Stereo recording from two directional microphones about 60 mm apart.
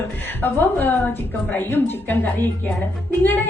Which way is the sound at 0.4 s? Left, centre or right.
Left.